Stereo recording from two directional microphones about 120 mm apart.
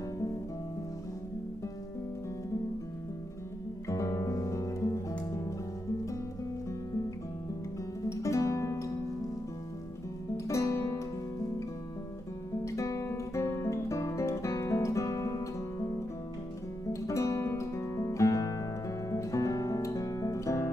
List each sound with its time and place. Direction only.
3.8 s music: 25° left (ahead or behind)
8.1 s music: 25° left (ahead or behind)
10.3 s music: 25° left (ahead or behind)
12.6 s guitar: 25° left (ahead or behind)